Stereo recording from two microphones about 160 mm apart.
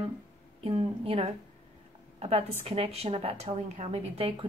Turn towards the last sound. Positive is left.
turn(degrees=-40)  # may be behind; listen again after turning